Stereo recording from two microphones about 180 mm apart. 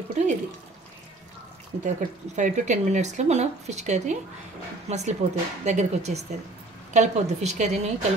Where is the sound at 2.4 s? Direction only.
45° right (ahead or behind).